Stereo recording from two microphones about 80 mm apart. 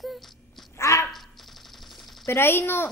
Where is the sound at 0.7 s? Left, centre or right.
Left.